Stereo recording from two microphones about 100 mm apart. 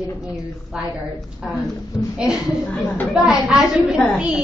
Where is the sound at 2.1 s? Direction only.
5° right (ahead or behind).